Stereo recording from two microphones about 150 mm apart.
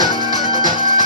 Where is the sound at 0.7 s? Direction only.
60° right (ahead or behind).